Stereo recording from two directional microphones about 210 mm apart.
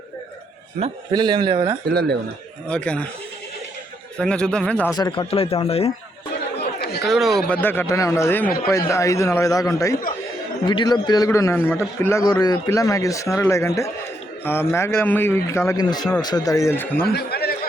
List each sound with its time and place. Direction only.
0.8 s a man's voice: 20° right (ahead or behind)
1.9 s speech: 50° right (ahead or behind)
2.6 s speech: 5° left (ahead or behind)
4.2 s speech: 5° left (ahead or behind)
4.9 s speech: 20° left (ahead or behind)
7.1 s a man's voice: centre (ahead or behind)
17.1 s a sound: 50° left (ahead or behind)